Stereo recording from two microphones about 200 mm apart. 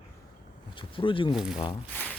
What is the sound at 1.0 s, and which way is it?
Speech, 25° left (ahead or behind).